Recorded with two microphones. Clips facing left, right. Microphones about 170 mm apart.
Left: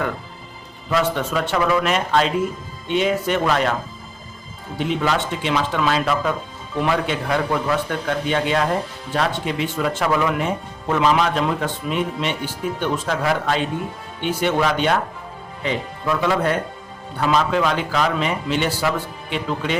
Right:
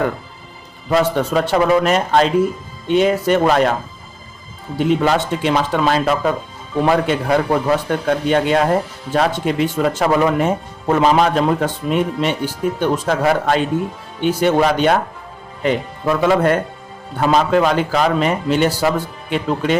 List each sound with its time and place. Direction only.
0.9 s speech: 40° right (ahead or behind)
5.0 s speech: 40° right (ahead or behind)